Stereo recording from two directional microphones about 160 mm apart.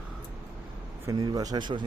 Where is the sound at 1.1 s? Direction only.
25° right (ahead or behind).